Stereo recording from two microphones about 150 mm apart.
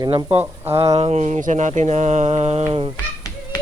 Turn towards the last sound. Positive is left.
turn(degrees=25)  # may be behind; listen again after turning